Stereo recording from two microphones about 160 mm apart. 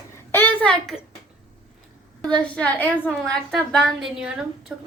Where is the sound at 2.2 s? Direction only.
5° left (ahead or behind).